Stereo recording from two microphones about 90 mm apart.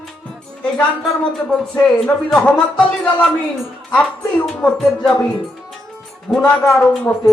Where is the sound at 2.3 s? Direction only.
15° left (ahead or behind).